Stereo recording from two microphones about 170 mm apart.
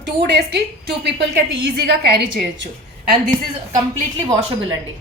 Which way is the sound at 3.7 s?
20° right (ahead or behind).